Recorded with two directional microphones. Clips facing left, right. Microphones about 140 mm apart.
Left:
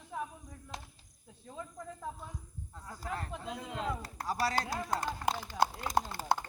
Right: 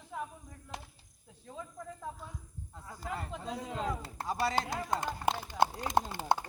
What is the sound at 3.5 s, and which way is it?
Speech, 35° right (ahead or behind).